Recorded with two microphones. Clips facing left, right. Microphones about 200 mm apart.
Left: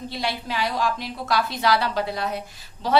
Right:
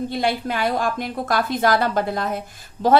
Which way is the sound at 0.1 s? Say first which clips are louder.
Right 6 dB; 50° right (ahead or behind).